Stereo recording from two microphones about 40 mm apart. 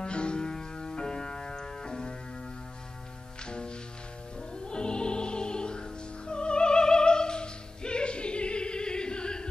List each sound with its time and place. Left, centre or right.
0.0 s music: left
3.4 s music: left